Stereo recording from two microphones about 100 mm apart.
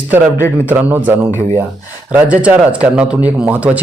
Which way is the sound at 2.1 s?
15° right (ahead or behind).